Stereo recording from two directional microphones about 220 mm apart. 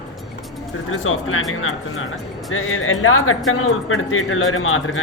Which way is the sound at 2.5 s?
70° left (ahead or behind).